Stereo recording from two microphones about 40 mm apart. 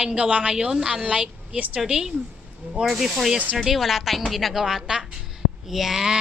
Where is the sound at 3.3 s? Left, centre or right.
Right.